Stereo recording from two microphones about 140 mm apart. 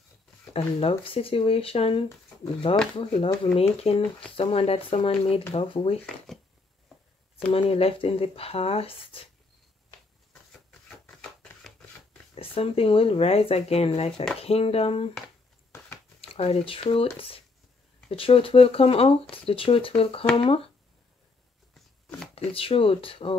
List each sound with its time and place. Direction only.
0.5 s speech: 45° left (ahead or behind)
6.0 s speech: centre (ahead or behind)
7.5 s speech: 45° left (ahead or behind)
11.1 s a sound: 5° left (ahead or behind)
12.4 s speech: 45° left (ahead or behind)
16.2 s speech: 45° left (ahead or behind)
21.7 s shuffling cards: centre (ahead or behind)
22.3 s speech: 45° left (ahead or behind)